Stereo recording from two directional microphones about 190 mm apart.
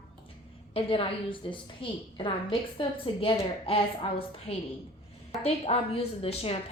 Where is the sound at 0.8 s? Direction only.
30° left (ahead or behind).